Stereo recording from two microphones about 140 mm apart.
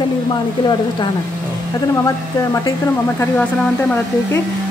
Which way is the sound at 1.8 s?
25° left (ahead or behind).